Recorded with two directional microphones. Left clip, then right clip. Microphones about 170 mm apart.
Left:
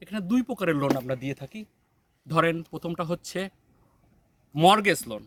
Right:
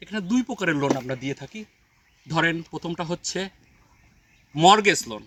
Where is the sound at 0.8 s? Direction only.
15° left (ahead or behind).